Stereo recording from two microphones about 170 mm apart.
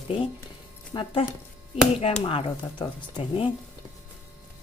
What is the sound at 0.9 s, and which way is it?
Speech, 25° left (ahead or behind).